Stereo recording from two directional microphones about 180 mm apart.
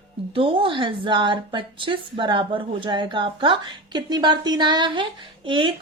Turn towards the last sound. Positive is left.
turn(degrees=-25)  # may be behind; listen again after turning